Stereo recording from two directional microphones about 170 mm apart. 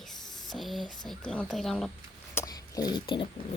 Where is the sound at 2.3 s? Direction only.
20° left (ahead or behind).